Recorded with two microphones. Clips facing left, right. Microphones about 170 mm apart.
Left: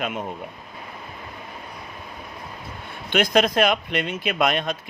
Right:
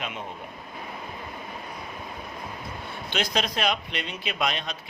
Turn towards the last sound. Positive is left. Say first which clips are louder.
# left 7 dB
turn(degrees=50)  # may be behind; listen again after turning